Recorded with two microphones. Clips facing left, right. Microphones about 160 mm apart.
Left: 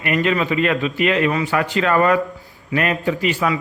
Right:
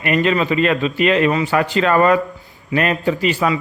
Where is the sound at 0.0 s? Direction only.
30° right (ahead or behind).